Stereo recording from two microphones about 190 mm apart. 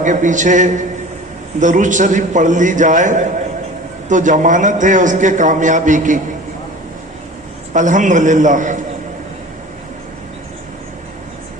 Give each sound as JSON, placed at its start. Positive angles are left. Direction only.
{"t": 0.0, "sound": "a man's voice", "side_deg": -40}
{"t": 7.7, "sound": "a man's voice", "side_deg": -40}